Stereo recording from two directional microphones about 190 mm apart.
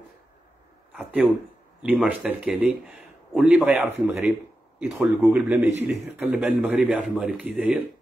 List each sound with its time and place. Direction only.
0.9 s a man's voice: 5° right (ahead or behind)